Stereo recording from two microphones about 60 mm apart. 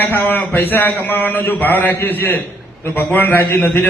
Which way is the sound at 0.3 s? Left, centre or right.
Left.